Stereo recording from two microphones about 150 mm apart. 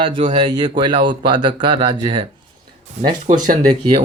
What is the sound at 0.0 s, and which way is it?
Speech, 35° right (ahead or behind).